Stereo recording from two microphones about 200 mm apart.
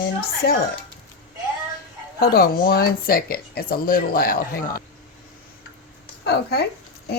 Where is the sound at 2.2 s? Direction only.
50° left (ahead or behind).